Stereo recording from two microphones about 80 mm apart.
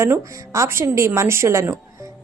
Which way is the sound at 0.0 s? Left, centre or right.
Right.